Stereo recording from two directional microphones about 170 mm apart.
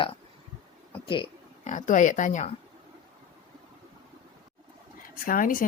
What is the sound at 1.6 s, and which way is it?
Speech, 45° left (ahead or behind).